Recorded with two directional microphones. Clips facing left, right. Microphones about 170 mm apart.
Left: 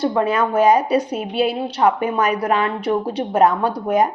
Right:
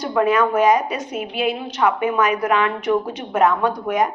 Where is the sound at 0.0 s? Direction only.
30° left (ahead or behind).